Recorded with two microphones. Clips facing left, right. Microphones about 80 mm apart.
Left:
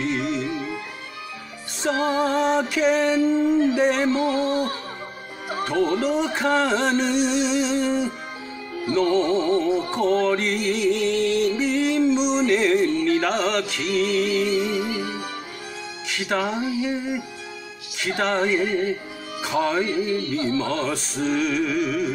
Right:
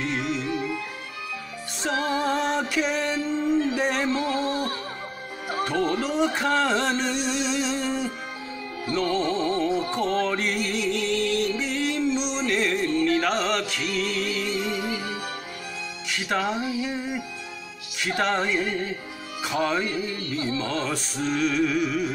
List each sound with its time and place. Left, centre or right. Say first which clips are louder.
0.0 s music: left 3 dB; centre
1.8 s music: left 4 dB; centre
3.6 s a sound: left 5 dB; centre
5.5 s music: left 3 dB; centre
16.2 s speech: left 2 dB; centre
21.3 s music: left 1 dB; centre
21.7 s music: left 2 dB; centre